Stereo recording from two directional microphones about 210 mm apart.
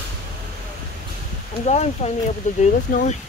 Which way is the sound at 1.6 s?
30° left (ahead or behind).